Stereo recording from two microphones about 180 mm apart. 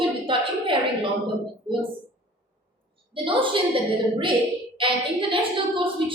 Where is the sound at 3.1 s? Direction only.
30° right (ahead or behind).